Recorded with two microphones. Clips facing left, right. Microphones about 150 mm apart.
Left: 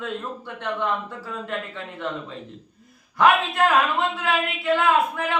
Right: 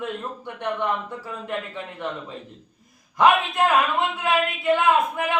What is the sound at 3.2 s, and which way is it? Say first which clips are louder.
Speech: even; 15° right (ahead or behind).